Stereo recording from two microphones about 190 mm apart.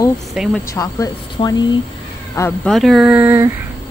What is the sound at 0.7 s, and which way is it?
Speech, 15° left (ahead or behind).